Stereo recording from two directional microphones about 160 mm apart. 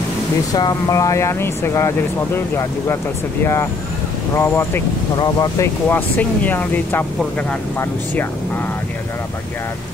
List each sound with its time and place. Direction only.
0.5 s speech: 25° left (ahead or behind)
4.4 s speech: 15° left (ahead or behind)